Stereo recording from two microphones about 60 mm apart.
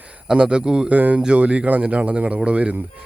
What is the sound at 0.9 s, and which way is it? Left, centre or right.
Speech, right.